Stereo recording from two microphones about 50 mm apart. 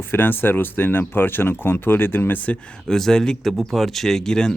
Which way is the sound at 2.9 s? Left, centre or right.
Centre.